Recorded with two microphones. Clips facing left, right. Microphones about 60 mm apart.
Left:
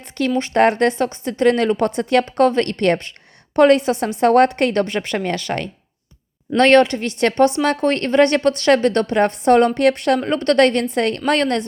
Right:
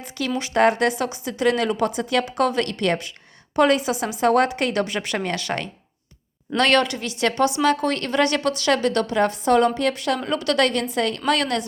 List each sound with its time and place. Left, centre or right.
0.3 s a woman's voice: left
2.4 s a woman's voice: left
5.5 s speech: centre
6.6 s a woman's voice: left